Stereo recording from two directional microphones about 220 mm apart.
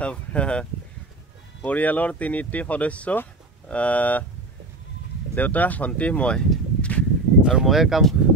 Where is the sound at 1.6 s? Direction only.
5° left (ahead or behind).